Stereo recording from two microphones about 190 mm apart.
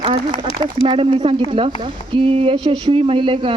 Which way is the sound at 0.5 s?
25° right (ahead or behind).